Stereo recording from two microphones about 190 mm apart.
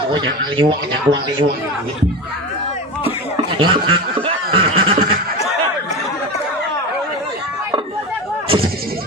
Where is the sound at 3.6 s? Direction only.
25° right (ahead or behind).